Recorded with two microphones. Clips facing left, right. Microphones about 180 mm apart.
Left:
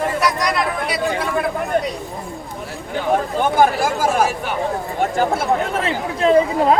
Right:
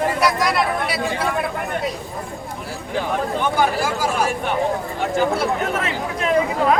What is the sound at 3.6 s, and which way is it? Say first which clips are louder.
Speech: left 5 dB; 50° left (ahead or behind).